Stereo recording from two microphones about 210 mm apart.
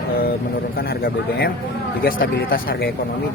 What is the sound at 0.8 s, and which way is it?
A man's voice, 45° left (ahead or behind).